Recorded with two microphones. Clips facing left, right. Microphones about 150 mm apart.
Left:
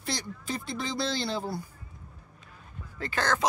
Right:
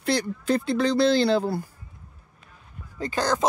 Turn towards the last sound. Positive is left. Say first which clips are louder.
# right 4 dB
turn(degrees=-15)  # may be behind; listen again after turning